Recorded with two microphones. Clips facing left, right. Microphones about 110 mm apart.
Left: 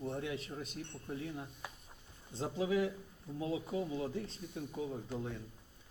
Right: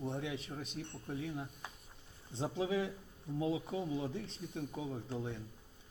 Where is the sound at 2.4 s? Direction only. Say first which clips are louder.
Left 2 dB; 25° right (ahead or behind).